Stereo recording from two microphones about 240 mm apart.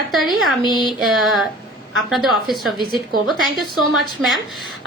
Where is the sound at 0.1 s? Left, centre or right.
Centre.